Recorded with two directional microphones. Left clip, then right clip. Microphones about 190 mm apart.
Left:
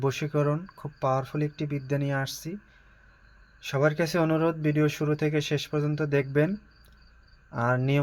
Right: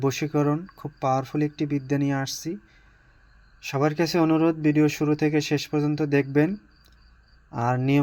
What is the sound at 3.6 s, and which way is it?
Speech, 15° right (ahead or behind).